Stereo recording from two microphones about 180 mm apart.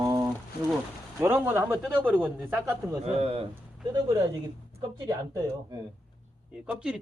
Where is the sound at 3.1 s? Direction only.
35° right (ahead or behind).